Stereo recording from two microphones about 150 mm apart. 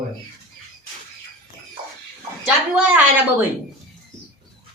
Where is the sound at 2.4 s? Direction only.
10° right (ahead or behind).